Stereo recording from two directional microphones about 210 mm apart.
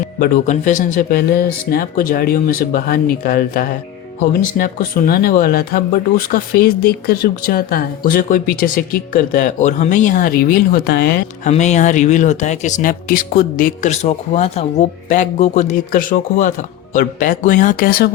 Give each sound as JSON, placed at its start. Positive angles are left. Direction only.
{"t": 0.2, "sound": "speech", "side_deg": 35}
{"t": 11.4, "sound": "speech", "side_deg": 35}